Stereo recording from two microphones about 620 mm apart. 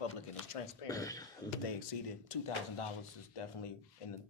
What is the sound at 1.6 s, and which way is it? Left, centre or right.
Speech, left.